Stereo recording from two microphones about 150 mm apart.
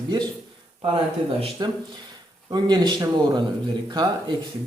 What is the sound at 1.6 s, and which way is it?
Speech, 30° right (ahead or behind).